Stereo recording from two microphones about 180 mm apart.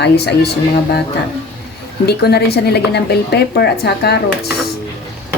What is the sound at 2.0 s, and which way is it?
Speech, 60° left (ahead or behind).